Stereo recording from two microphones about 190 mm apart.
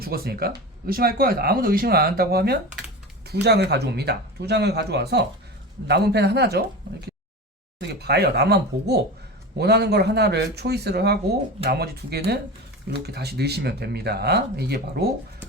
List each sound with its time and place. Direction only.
0.0 s speech: 55° right (ahead or behind)
7.8 s speech: 60° right (ahead or behind)